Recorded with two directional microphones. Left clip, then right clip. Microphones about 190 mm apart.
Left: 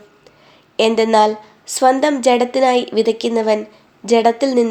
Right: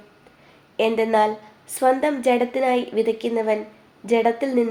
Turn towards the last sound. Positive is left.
turn(degrees=40)  # may be behind; listen again after turning